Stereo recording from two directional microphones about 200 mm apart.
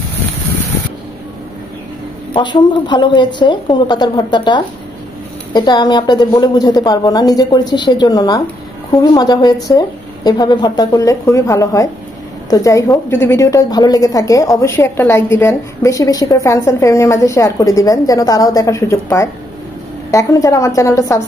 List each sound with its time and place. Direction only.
2.3 s a woman's voice: 20° left (ahead or behind)